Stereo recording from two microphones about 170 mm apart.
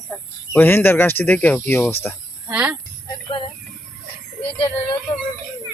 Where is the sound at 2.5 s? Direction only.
10° right (ahead or behind).